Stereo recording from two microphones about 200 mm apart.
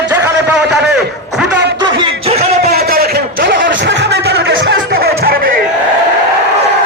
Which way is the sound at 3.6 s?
60° right (ahead or behind).